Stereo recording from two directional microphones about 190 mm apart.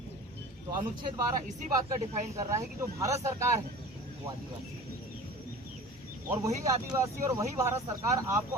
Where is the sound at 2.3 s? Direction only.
15° right (ahead or behind).